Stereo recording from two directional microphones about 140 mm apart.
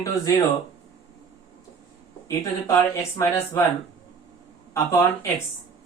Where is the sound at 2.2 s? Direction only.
25° left (ahead or behind).